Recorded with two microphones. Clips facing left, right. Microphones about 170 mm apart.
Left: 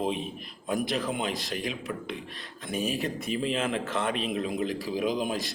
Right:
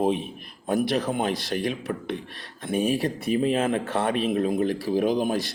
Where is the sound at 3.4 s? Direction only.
50° right (ahead or behind).